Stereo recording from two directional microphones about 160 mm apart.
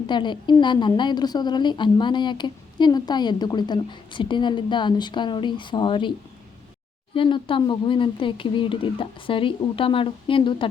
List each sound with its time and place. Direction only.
0.1 s a woman's voice: 30° left (ahead or behind)